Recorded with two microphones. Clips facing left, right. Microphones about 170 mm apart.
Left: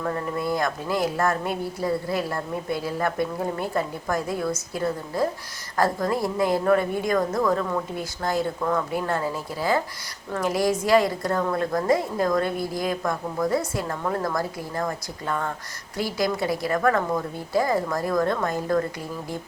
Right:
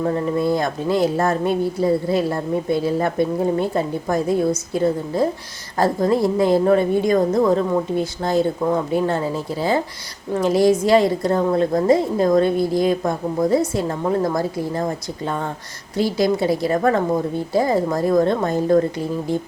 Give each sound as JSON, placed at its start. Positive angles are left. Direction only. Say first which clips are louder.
{"t": 0.0, "sound": "speech", "louder": "right 7 dB", "side_deg": -25}